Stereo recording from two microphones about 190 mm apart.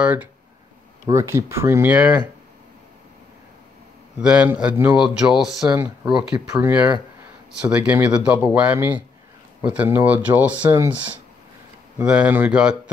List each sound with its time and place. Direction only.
0.0 s speech: 10° right (ahead or behind)
4.2 s a man's voice: 5° right (ahead or behind)
6.5 s speech: 15° right (ahead or behind)
12.0 s speech: 5° right (ahead or behind)